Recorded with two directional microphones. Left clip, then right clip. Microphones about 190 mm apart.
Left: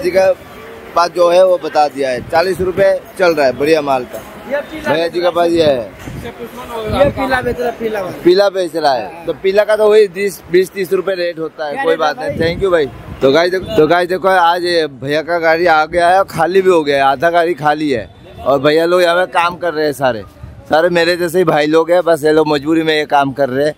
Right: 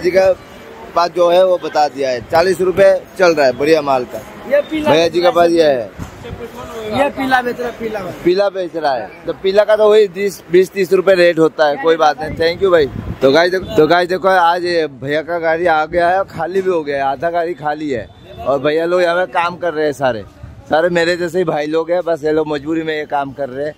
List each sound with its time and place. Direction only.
0.0 s speech: centre (ahead or behind)
4.9 s speech: 30° right (ahead or behind)
5.3 s speech: 10° right (ahead or behind)
7.9 s speech: 20° left (ahead or behind)
9.3 s speech: centre (ahead or behind); by 11.7 s 35° right (ahead or behind)
11.8 s speech: 20° right (ahead or behind)
13.3 s speech: centre (ahead or behind)
16.2 s speech: 35° left (ahead or behind)